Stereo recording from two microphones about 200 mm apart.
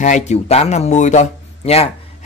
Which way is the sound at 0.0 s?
35° left (ahead or behind).